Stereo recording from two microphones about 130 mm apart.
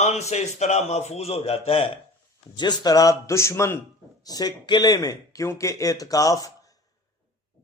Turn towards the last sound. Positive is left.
turn(degrees=25)  # may be behind; listen again after turning